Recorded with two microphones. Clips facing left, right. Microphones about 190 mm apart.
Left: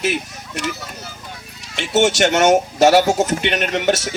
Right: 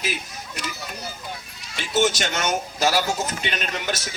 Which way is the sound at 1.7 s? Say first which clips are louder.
Left 6 dB; 75° left (ahead or behind).